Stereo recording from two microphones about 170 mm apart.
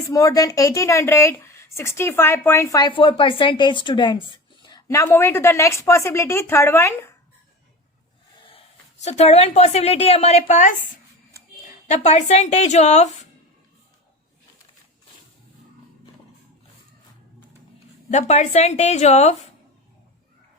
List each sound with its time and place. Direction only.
0.1 s speech: 20° left (ahead or behind)
8.4 s a woman's voice: 35° left (ahead or behind)
11.9 s a woman's voice: 40° left (ahead or behind)
18.1 s a woman's voice: 40° left (ahead or behind)